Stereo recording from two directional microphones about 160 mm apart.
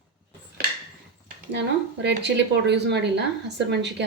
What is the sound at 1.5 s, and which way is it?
A woman's voice, 90° right.